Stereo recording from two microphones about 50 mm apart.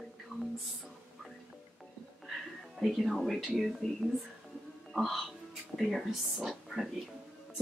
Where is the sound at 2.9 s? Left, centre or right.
Centre.